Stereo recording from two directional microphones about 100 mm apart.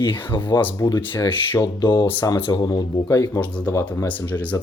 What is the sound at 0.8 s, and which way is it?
Speech, 40° left (ahead or behind).